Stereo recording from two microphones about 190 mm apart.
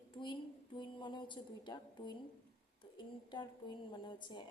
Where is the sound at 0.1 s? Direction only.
25° left (ahead or behind).